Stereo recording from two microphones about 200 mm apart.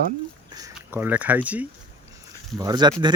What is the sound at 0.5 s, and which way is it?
Speech, 15° right (ahead or behind).